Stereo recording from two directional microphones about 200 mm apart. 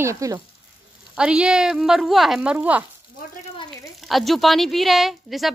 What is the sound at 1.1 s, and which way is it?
Speech, 5° right (ahead or behind).